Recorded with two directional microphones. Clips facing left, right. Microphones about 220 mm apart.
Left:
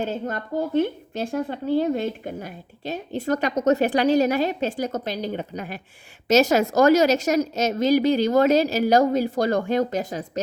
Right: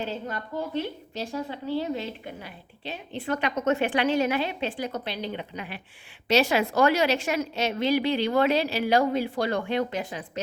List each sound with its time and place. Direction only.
0.0 s speech: 45° left (ahead or behind)